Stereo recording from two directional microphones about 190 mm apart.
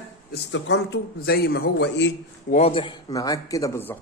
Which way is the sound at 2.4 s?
35° left (ahead or behind).